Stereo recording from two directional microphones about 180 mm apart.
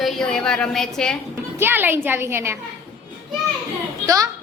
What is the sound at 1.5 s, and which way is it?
A child's voice, 10° right (ahead or behind).